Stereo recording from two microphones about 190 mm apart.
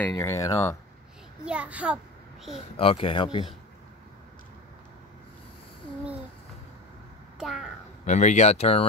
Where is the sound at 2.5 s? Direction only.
30° left (ahead or behind).